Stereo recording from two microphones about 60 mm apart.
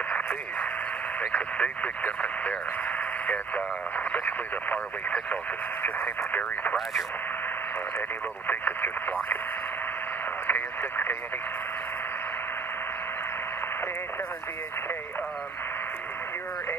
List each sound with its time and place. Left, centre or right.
1.3 s speech: left
5.8 s speech: left
8.5 s speech: left
10.4 s radio: left